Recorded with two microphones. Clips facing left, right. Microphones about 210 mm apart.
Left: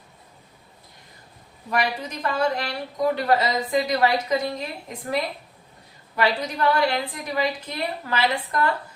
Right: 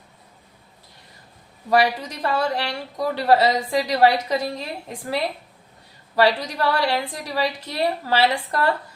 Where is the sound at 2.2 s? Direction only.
30° right (ahead or behind).